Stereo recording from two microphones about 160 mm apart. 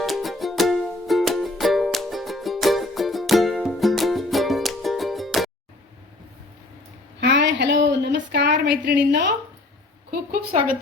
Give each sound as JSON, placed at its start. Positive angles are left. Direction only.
{"t": 0.0, "sound": "music", "side_deg": 0}
{"t": 7.2, "sound": "a woman's voice", "side_deg": -90}